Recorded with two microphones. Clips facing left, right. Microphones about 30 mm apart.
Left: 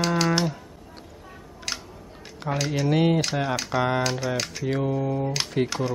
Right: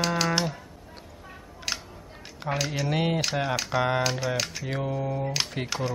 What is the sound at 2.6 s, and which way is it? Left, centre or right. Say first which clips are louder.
Speech: left 5 dB; centre.